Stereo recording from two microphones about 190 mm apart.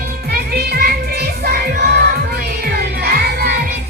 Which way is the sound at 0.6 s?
55° right (ahead or behind).